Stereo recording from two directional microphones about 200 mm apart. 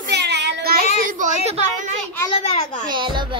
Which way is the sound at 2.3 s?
35° left (ahead or behind).